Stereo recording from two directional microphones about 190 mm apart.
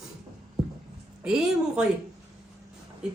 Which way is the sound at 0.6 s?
5° right (ahead or behind).